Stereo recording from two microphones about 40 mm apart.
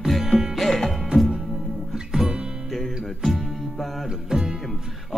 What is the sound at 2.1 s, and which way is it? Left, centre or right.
Music, right.